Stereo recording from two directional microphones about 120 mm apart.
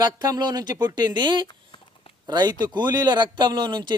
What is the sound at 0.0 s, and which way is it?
Speech, 35° right (ahead or behind).